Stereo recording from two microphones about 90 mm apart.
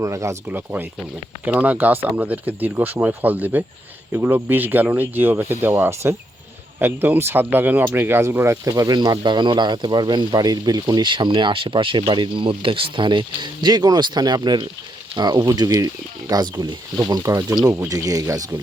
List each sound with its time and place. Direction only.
0.0 s speech: 35° right (ahead or behind)
0.4 s speech: 20° right (ahead or behind)
8.6 s speech: 40° right (ahead or behind)
11.1 s speech: 60° right (ahead or behind); by 18.4 s 40° right (ahead or behind)